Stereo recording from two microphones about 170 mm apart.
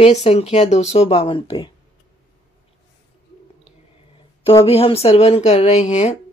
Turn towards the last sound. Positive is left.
turn(degrees=40)  # may be behind; listen again after turning